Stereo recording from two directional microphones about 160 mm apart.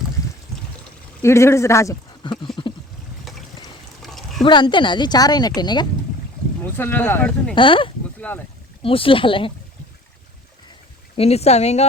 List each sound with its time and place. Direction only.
1.2 s speech: 15° left (ahead or behind)
4.0 s a sound: centre (ahead or behind)
4.4 s speech: 30° left (ahead or behind)
6.6 s speech: 15° left (ahead or behind)
7.5 s speech: 30° left (ahead or behind)
8.2 s speech: 10° left (ahead or behind)
8.8 s speech: 35° left (ahead or behind)
11.2 s speech: 40° left (ahead or behind)